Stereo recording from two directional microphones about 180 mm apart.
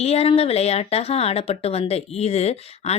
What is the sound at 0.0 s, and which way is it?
Speech, 35° left (ahead or behind).